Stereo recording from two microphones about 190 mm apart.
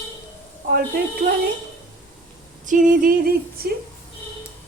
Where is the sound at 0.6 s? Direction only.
45° right (ahead or behind).